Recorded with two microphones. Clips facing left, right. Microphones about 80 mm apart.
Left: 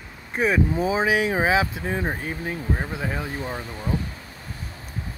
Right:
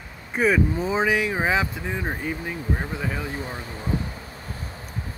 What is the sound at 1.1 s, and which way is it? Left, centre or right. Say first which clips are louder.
Speech: left 2 dB; left.